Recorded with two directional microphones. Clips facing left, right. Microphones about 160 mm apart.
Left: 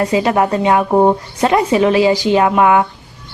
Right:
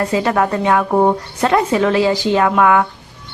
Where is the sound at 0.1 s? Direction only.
15° left (ahead or behind).